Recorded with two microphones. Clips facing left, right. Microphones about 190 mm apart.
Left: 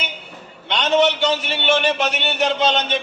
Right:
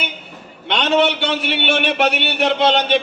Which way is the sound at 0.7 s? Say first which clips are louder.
Right 1 dB; 60° right (ahead or behind).